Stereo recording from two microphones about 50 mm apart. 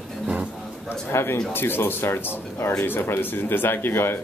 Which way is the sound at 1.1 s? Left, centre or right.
Left.